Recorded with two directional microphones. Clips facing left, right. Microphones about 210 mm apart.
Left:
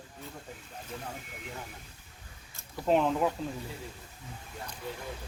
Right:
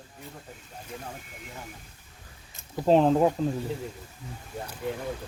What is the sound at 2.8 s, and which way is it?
Speech, 35° right (ahead or behind).